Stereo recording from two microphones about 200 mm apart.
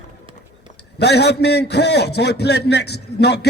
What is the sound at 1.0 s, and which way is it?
A man's voice, 55° left (ahead or behind).